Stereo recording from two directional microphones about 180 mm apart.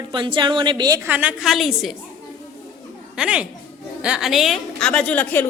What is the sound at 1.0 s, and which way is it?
Speech, 10° right (ahead or behind).